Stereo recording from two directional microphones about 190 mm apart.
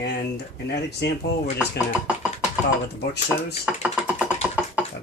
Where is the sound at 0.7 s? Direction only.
60° left (ahead or behind).